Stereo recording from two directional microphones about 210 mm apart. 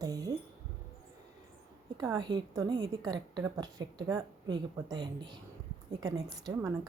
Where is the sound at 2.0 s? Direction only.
15° right (ahead or behind).